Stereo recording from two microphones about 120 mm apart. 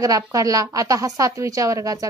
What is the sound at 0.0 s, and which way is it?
A woman's voice, 30° right (ahead or behind).